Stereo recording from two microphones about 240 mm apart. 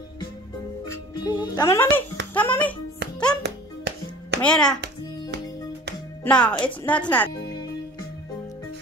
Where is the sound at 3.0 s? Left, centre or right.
Right.